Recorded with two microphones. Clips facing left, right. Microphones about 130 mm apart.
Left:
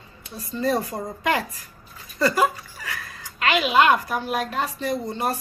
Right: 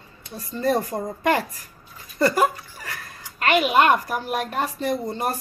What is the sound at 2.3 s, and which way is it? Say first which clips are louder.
Speech: right 1 dB; 40° right (ahead or behind).